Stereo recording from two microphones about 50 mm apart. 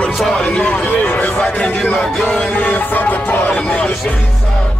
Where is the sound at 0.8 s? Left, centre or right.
Left; by 2.4 s centre.